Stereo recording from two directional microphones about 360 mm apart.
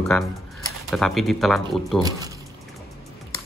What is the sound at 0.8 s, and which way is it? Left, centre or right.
Speech, centre.